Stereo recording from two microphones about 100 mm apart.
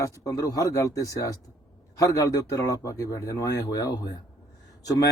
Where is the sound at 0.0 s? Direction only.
35° left (ahead or behind).